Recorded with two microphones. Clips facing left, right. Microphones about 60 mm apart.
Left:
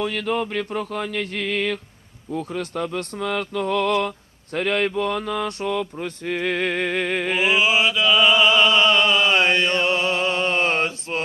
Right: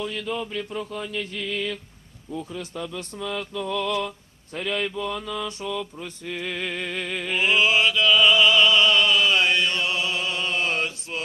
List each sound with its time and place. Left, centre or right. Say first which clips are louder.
0.0 s mantra: left 5 dB; left
7.5 s mantra: right 1 dB; centre; by 11.2 s left